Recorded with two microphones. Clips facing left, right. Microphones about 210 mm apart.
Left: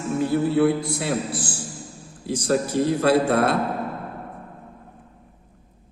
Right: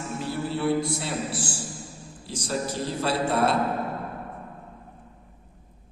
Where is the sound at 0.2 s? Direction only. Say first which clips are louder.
Left 10 dB; 55° left (ahead or behind).